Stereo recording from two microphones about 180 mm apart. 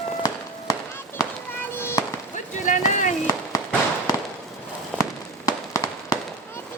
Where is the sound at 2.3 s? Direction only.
45° left (ahead or behind).